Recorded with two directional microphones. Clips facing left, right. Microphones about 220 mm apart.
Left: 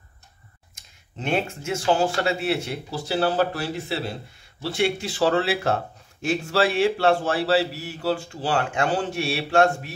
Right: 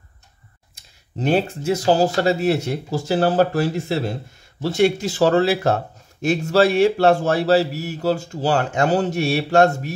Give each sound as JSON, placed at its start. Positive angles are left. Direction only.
{"t": 0.7, "sound": "a man's voice", "side_deg": -35}